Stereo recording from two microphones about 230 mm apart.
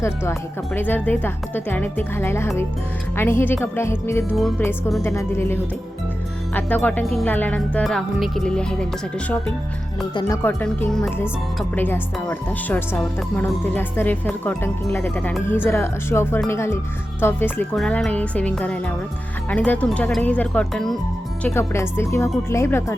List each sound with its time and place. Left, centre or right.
0.0 s speech: centre
4.9 s speech: centre
5.1 s speech: centre
10.4 s speech: centre